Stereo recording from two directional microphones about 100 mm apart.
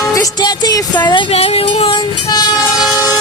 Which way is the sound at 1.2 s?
80° left.